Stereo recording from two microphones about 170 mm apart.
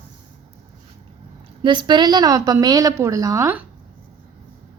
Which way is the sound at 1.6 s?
25° right (ahead or behind).